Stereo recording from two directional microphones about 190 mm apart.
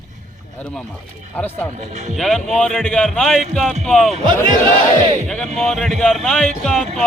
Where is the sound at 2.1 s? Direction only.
Centre (ahead or behind).